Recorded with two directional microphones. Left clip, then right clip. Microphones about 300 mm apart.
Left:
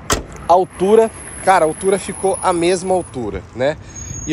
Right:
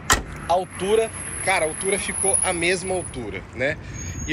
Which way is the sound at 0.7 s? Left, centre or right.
Left.